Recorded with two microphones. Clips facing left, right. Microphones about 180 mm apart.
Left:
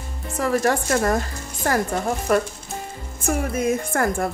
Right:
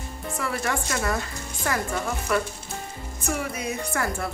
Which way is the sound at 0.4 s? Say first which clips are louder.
Left 8 dB; 40° left (ahead or behind).